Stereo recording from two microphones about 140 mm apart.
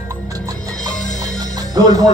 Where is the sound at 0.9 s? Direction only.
60° left (ahead or behind).